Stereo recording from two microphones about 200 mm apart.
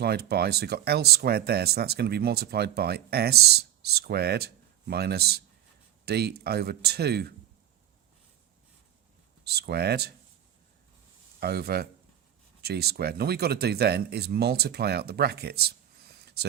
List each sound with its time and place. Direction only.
0.0 s speech: 55° right (ahead or behind)
9.4 s speech: 55° right (ahead or behind)
11.3 s speech: 50° right (ahead or behind)